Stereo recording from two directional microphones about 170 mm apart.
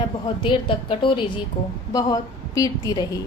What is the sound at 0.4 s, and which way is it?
A woman's voice, 30° left (ahead or behind).